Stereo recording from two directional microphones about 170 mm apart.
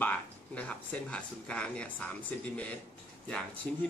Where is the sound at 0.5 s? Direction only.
5° left (ahead or behind).